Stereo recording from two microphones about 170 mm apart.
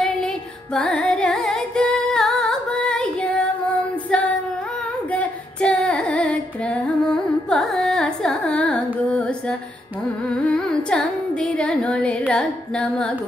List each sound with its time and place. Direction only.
0.7 s music: 5° left (ahead or behind)
4.1 s female singing: 5° left (ahead or behind)
10.3 s carnatic music: 5° left (ahead or behind)